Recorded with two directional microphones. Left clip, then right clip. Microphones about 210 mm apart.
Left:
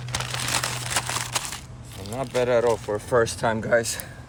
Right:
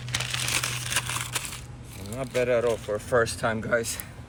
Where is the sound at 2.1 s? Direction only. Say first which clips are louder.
Left 3 dB; 35° left (ahead or behind).